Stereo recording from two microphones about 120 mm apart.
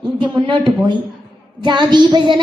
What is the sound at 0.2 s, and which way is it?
Speech, 40° right (ahead or behind).